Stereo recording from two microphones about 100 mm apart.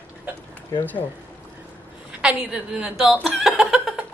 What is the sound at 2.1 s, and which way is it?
A woman's voice, 10° right (ahead or behind).